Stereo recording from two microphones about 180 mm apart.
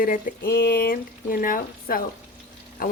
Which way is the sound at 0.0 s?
50° left (ahead or behind).